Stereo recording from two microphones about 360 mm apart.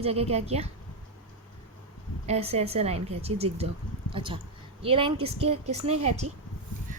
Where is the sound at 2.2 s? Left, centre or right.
Centre.